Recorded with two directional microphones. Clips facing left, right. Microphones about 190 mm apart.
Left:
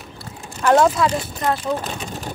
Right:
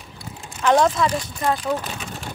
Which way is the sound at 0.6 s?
5° left (ahead or behind).